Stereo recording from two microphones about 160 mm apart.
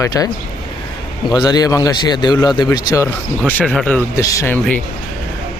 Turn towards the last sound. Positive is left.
turn(degrees=20)  # may be behind; listen again after turning